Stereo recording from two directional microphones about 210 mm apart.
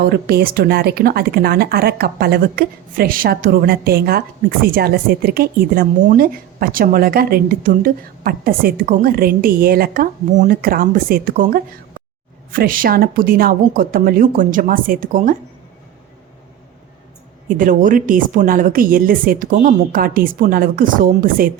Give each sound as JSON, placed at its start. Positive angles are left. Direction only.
{"t": 0.1, "sound": "a woman's voice", "side_deg": -50}
{"t": 17.5, "sound": "speech", "side_deg": -40}